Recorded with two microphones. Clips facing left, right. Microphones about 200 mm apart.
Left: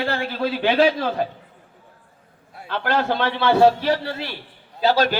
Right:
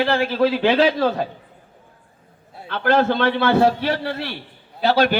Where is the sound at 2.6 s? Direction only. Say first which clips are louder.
Right 4 dB; 55° right (ahead or behind).